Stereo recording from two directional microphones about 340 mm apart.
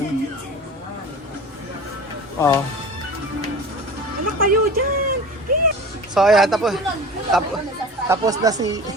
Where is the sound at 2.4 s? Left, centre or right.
Centre.